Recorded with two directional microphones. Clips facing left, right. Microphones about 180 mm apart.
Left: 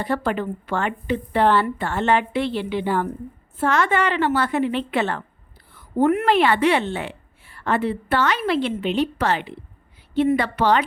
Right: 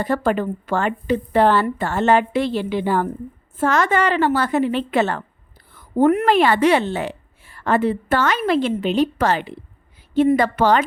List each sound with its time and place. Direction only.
0.0 s a woman's voice: 45° right (ahead or behind)